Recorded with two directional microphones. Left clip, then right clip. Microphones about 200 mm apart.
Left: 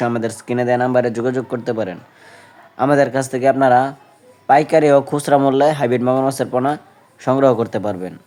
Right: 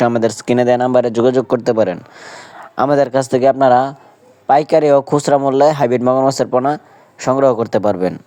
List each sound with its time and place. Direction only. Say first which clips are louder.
0.0 s speech: right 6 dB; 35° right (ahead or behind)